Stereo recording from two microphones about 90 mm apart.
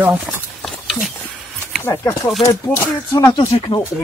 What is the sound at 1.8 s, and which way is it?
Speech, 30° left (ahead or behind).